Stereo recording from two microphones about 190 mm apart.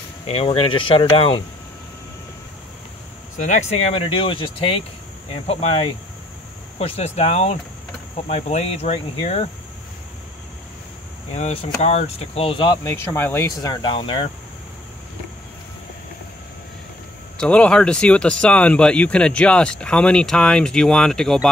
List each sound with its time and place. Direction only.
0.3 s speech: 30° left (ahead or behind)
3.3 s speech: 40° left (ahead or behind)
11.3 s speech: 35° left (ahead or behind)
17.4 s speech: 5° left (ahead or behind)